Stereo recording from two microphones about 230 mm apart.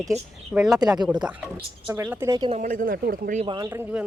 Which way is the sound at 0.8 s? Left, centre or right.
Centre.